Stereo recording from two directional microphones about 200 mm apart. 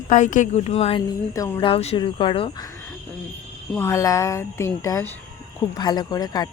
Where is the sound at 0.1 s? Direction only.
40° left (ahead or behind); by 1.7 s 15° left (ahead or behind).